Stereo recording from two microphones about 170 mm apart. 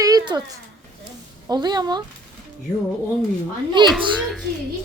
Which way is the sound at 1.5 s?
25° right (ahead or behind).